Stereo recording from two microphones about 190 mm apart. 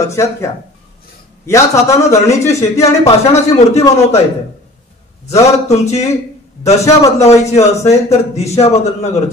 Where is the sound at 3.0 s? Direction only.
35° left (ahead or behind).